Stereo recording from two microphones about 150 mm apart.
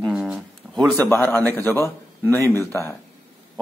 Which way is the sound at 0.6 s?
10° right (ahead or behind).